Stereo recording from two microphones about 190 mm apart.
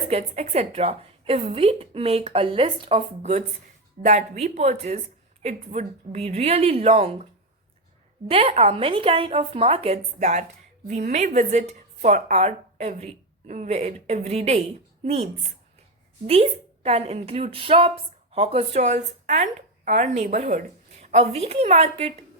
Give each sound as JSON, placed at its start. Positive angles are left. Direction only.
{"t": 0.1, "sound": "a woman's voice", "side_deg": -35}
{"t": 8.3, "sound": "a woman's voice", "side_deg": -30}